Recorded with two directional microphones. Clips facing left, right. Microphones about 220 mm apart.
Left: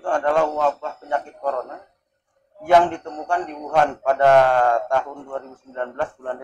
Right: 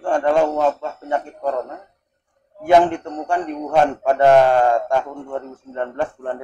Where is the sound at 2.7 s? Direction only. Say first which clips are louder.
Right 2 dB; 15° right (ahead or behind).